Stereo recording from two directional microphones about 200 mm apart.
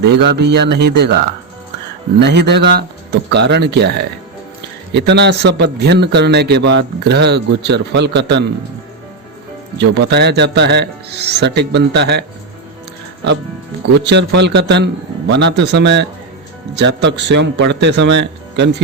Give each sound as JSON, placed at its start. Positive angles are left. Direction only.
{"t": 0.0, "sound": "a man's voice", "side_deg": -55}
{"t": 9.7, "sound": "a man's voice", "side_deg": -60}
{"t": 13.9, "sound": "a man's voice", "side_deg": -60}